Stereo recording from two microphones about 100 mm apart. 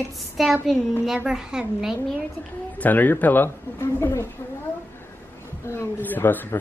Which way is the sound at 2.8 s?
15° left (ahead or behind).